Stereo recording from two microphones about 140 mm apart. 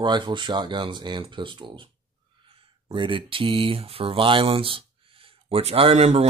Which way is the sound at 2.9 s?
35° right (ahead or behind).